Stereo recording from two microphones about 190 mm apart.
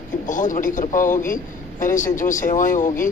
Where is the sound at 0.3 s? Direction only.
45° left (ahead or behind).